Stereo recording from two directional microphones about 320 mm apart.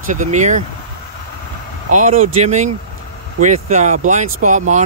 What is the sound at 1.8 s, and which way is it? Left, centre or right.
Speech, right.